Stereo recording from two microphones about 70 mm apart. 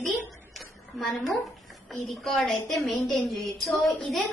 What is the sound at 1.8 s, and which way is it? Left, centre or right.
A woman's voice, centre.